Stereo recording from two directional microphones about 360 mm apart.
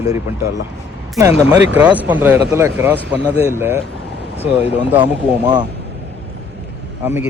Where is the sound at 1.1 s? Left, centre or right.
Centre.